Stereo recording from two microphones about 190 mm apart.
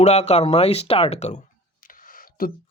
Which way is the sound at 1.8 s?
45° left (ahead or behind).